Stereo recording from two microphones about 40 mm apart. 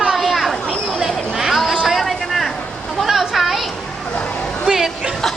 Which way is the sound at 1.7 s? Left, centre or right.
Centre.